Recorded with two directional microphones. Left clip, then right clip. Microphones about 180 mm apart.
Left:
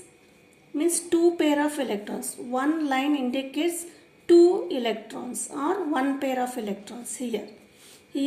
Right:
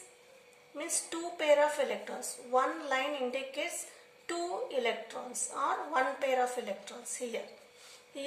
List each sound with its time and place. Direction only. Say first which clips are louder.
0.8 s a woman's voice: left 15 dB; 45° left (ahead or behind)